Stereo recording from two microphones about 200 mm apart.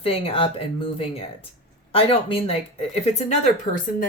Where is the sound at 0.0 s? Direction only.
30° left (ahead or behind).